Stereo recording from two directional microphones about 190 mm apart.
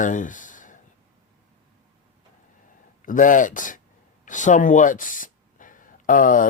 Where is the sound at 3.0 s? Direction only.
45° left (ahead or behind).